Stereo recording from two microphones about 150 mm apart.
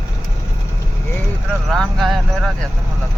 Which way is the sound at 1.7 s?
Centre (ahead or behind).